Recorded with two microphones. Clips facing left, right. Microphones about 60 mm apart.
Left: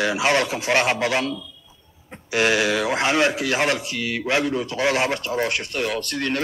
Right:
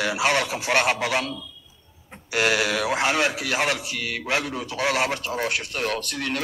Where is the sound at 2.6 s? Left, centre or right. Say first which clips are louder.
Left 2 dB; centre.